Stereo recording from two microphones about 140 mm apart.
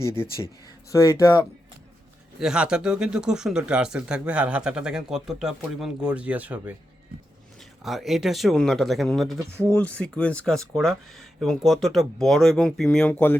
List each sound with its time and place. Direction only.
0.9 s speech: 25° left (ahead or behind)
2.4 s speech: 5° right (ahead or behind); by 13.3 s 10° left (ahead or behind)